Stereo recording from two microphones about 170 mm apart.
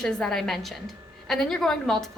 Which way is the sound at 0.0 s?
5° left (ahead or behind).